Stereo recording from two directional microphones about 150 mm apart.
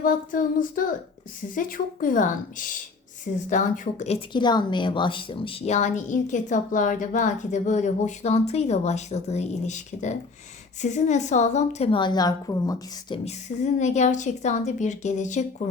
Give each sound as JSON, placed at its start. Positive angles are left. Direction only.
{"t": 0.0, "sound": "a woman's voice", "side_deg": 65}
{"t": 4.3, "sound": "a woman's voice", "side_deg": 30}
{"t": 13.2, "sound": "a woman's voice", "side_deg": 50}